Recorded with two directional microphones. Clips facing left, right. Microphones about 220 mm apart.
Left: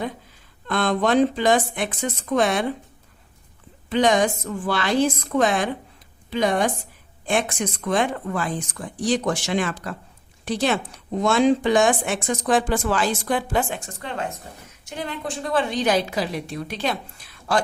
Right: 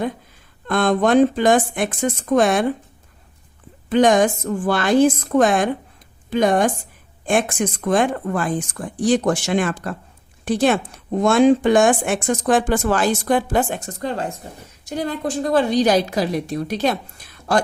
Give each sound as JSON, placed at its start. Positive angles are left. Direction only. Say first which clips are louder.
{"t": 0.7, "sound": "a woman's voice", "louder": "right 4 dB", "side_deg": -50}
{"t": 3.8, "sound": "a woman's voice", "louder": "right 4 dB", "side_deg": -50}